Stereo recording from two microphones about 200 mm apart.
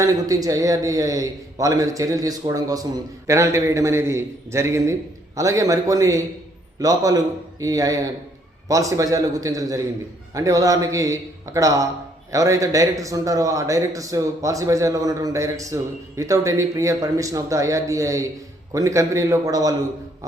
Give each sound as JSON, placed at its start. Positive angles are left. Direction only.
{"t": 0.0, "sound": "a man's voice", "side_deg": -15}